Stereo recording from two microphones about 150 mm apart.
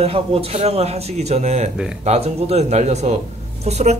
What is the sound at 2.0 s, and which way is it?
Speech, 45° right (ahead or behind).